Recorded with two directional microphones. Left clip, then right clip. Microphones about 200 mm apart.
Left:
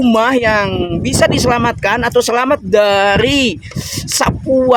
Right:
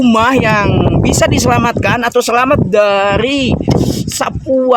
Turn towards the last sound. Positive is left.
turn(degrees=0)  # may be behind; listen again after turning